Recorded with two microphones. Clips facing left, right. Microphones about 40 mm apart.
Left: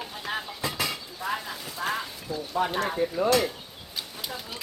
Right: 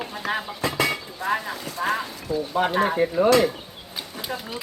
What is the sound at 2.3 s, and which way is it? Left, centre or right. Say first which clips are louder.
Speech: right 8 dB; right.